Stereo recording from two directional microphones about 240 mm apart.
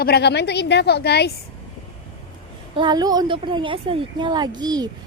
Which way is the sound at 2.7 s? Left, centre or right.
Centre.